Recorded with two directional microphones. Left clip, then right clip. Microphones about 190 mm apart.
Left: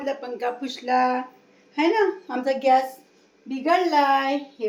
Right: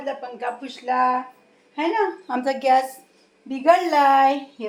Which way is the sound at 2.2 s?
25° right (ahead or behind).